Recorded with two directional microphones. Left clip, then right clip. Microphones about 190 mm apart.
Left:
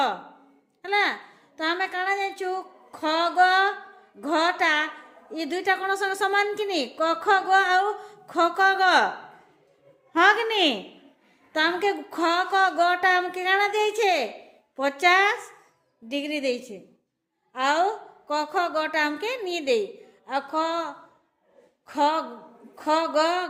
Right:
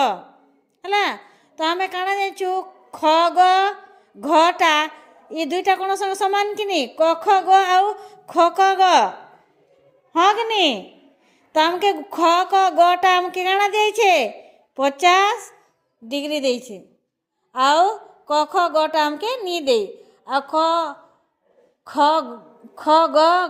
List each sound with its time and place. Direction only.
0.8 s a woman's voice: 35° right (ahead or behind)
10.1 s a woman's voice: 25° right (ahead or behind)